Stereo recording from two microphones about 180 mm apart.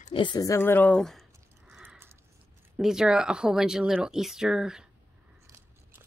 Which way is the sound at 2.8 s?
5° right (ahead or behind).